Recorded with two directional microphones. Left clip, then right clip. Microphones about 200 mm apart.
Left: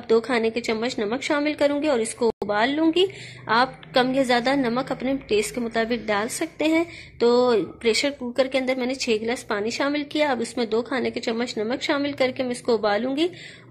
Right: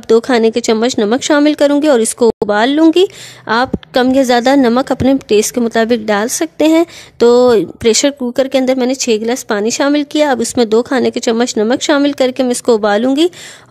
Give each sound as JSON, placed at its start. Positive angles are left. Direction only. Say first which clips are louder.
{"t": 0.1, "sound": "a woman's voice", "louder": "right 11 dB", "side_deg": -50}